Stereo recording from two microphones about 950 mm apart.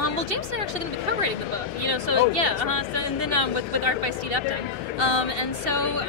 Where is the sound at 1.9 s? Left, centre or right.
Right.